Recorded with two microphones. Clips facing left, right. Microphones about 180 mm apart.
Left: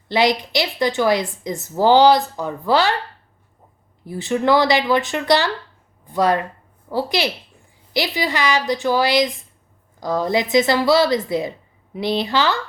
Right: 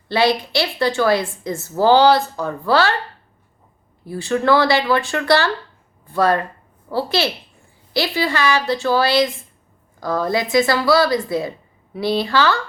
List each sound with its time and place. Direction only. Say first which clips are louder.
0.1 s a woman's voice: right 1 dB; 15° left (ahead or behind)
4.0 s a woman's voice: right 1 dB; 20° left (ahead or behind)